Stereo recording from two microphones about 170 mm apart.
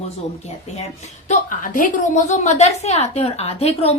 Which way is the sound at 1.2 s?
50° left (ahead or behind).